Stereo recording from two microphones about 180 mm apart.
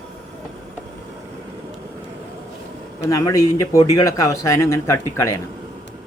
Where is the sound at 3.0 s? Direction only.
20° left (ahead or behind).